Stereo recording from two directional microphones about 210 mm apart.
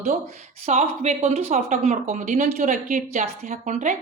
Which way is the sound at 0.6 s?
35° right (ahead or behind).